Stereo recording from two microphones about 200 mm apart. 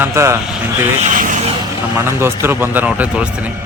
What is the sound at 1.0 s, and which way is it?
Vehicle, 40° right (ahead or behind).